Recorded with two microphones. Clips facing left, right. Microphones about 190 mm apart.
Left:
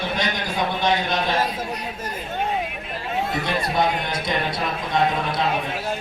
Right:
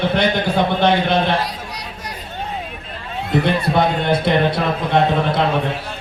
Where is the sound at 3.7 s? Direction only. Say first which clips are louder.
Right 6 dB; 65° right (ahead or behind).